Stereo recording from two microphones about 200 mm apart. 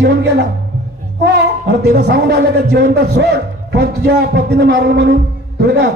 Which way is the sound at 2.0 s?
55° right (ahead or behind).